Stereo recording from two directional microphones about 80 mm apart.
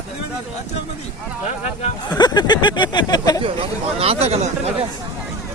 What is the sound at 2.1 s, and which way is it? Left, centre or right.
Speech, left.